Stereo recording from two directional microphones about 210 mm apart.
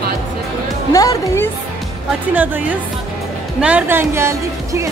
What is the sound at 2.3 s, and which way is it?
Speech, 10° right (ahead or behind).